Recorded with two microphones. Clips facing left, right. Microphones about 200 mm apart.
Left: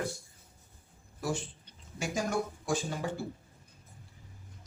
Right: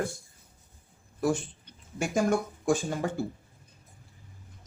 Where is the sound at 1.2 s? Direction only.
55° right (ahead or behind).